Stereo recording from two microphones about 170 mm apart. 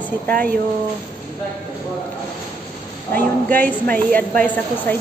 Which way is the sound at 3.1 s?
10° left (ahead or behind).